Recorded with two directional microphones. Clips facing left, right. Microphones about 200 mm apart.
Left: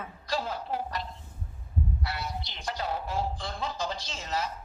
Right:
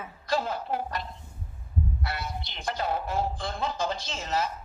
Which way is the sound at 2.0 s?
55° right (ahead or behind).